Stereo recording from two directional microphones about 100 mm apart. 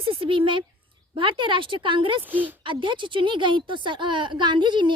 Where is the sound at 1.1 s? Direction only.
55° right (ahead or behind).